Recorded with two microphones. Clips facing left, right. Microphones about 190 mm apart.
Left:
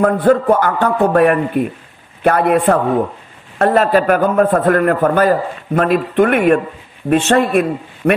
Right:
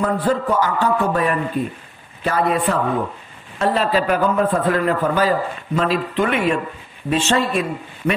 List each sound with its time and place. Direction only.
0.0 s a man's voice: 55° left (ahead or behind)